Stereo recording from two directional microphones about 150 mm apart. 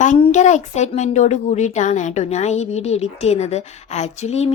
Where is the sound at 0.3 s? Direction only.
50° left (ahead or behind).